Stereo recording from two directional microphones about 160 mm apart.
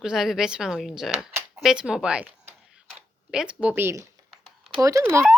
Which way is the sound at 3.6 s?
15° right (ahead or behind).